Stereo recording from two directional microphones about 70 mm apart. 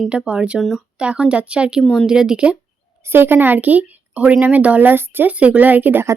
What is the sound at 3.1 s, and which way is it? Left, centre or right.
Speech, right.